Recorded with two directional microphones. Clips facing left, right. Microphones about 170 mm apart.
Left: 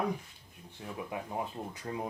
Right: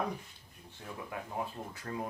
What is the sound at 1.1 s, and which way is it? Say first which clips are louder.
Speech: left 1 dB; 20° left (ahead or behind).